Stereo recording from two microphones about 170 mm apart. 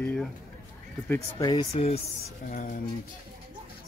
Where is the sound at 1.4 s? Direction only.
30° left (ahead or behind).